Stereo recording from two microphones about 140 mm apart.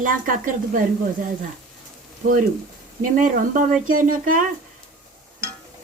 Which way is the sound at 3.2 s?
70° right (ahead or behind).